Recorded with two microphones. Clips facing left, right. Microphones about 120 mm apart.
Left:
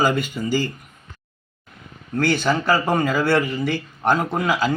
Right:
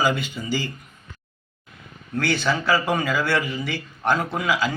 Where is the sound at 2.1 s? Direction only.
45° left (ahead or behind).